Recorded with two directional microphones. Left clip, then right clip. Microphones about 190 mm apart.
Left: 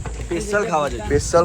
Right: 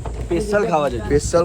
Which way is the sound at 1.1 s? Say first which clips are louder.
Even; centre (ahead or behind).